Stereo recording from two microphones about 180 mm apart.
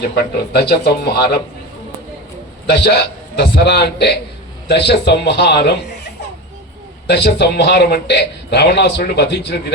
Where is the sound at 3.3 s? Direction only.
65° left (ahead or behind).